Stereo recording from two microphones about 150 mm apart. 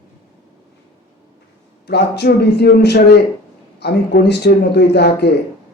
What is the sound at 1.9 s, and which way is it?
A man's voice, 90° left.